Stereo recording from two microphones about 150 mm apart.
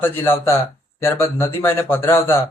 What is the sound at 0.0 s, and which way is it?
A man's voice, 15° left (ahead or behind).